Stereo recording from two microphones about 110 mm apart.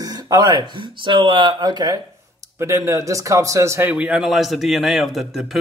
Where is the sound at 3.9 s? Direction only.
10° right (ahead or behind).